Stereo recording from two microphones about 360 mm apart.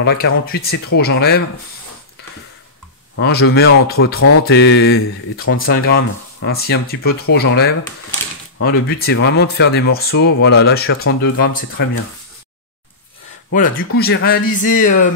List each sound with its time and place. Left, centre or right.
0.0 s speech: left
3.2 s speech: left
13.5 s speech: left